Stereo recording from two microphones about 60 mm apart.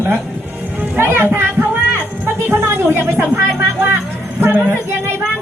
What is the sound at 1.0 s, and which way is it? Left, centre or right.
Speech, right.